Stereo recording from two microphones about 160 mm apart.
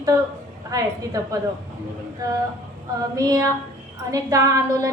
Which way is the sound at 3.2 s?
20° right (ahead or behind).